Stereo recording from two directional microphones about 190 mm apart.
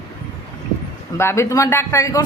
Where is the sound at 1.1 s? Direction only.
15° left (ahead or behind).